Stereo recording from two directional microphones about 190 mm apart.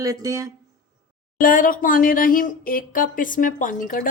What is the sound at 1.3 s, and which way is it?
A woman's voice, 45° left (ahead or behind).